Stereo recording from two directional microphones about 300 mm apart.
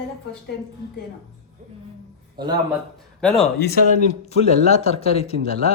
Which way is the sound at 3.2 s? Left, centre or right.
Centre.